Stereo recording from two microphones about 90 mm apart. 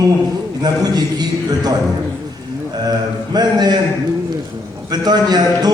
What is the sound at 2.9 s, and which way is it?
Speech, 50° right (ahead or behind).